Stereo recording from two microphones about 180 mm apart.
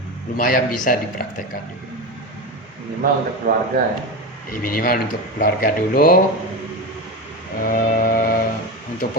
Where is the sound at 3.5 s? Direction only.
55° right (ahead or behind).